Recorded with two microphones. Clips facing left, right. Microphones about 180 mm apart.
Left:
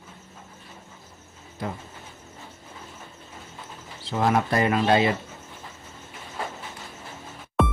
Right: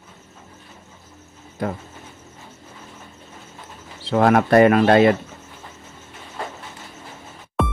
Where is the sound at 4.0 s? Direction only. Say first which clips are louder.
Right 7 dB; 65° right (ahead or behind).